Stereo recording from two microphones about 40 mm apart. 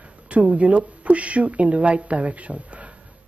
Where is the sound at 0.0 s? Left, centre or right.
Right.